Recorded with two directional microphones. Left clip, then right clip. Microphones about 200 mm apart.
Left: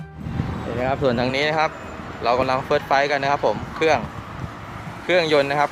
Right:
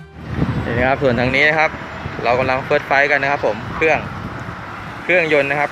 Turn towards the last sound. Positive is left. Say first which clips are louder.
# right 3 dB
turn(degrees=15)  # may be behind; listen again after turning